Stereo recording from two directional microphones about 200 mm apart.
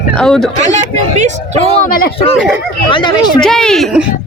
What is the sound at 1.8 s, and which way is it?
Speech, 45° left (ahead or behind).